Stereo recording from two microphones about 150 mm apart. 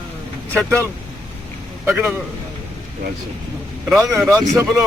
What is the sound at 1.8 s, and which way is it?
Speech, 10° right (ahead or behind).